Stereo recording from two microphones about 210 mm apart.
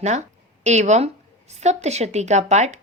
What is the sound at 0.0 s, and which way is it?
A woman's voice, 35° right (ahead or behind).